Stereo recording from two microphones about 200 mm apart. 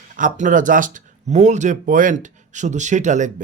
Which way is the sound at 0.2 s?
40° right (ahead or behind).